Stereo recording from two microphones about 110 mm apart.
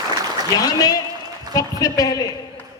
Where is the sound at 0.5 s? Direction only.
35° left (ahead or behind).